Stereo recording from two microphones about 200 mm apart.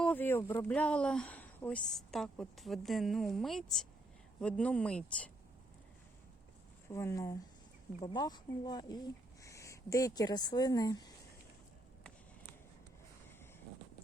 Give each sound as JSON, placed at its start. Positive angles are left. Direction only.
{"t": 0.0, "sound": "speech", "side_deg": 10}
{"t": 6.9, "sound": "speech", "side_deg": 15}